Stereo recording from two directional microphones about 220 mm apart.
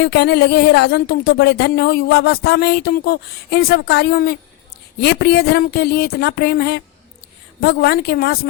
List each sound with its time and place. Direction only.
0.0 s speech: 45° left (ahead or behind)